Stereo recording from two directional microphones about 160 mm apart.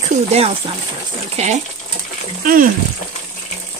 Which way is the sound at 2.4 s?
60° right (ahead or behind).